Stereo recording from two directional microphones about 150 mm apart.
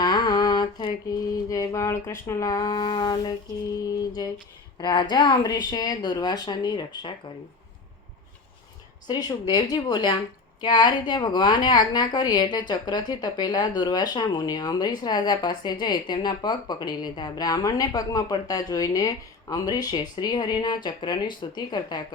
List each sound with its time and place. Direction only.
0.0 s mantra: 30° left (ahead or behind)
1.5 s a woman's voice: 20° left (ahead or behind)
9.0 s a woman's voice: 25° left (ahead or behind)